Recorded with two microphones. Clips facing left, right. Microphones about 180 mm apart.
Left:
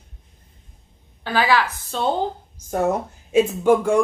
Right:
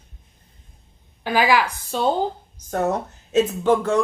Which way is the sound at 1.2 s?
15° right (ahead or behind).